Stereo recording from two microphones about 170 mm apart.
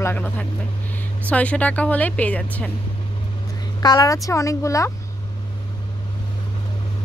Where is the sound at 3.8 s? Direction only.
20° left (ahead or behind).